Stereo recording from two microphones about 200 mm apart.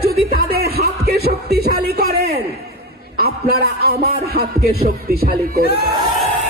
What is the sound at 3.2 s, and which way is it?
A man's voice, 50° right (ahead or behind).